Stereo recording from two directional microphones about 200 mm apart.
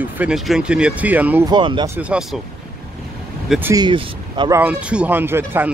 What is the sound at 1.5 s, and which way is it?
Speech, 25° right (ahead or behind).